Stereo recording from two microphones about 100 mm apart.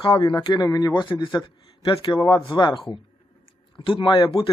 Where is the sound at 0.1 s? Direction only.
40° left (ahead or behind).